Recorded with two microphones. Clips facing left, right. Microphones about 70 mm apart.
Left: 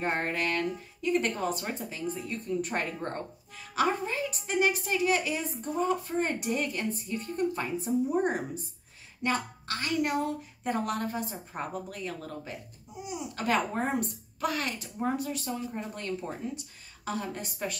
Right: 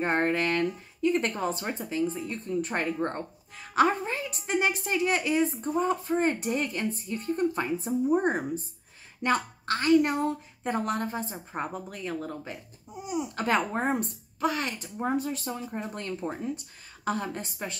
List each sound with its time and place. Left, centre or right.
0.0 s a woman's voice: right
17.0 s a woman's voice: right